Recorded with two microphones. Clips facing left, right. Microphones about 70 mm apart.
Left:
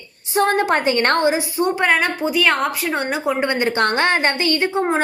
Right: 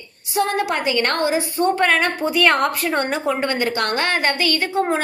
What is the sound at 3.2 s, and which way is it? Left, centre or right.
A woman's voice, centre.